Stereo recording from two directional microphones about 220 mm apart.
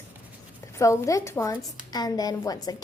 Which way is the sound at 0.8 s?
15° left (ahead or behind).